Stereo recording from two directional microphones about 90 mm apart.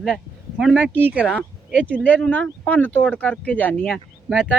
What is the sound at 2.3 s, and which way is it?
Speech, 15° left (ahead or behind).